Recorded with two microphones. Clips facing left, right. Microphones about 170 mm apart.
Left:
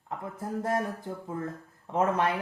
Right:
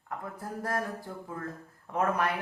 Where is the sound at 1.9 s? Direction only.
25° left (ahead or behind).